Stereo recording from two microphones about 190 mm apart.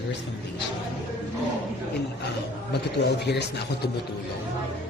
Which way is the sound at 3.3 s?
60° left (ahead or behind).